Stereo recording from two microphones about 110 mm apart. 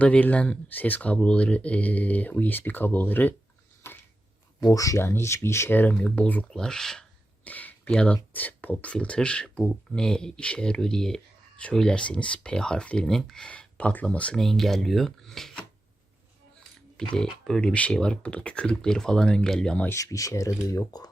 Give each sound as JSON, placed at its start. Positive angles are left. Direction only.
{"t": 0.0, "sound": "speech", "side_deg": 15}
{"t": 3.8, "sound": "a sound", "side_deg": 20}
{"t": 4.6, "sound": "speech", "side_deg": 30}
{"t": 17.0, "sound": "speech", "side_deg": 10}
{"t": 19.9, "sound": "speech", "side_deg": 30}